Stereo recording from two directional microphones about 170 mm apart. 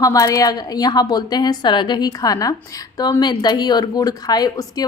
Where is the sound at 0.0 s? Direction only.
20° left (ahead or behind).